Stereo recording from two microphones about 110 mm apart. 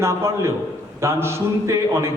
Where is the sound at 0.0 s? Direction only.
25° right (ahead or behind).